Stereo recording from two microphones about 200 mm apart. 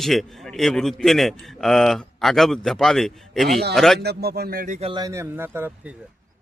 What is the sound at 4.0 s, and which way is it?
Speech, 55° right (ahead or behind).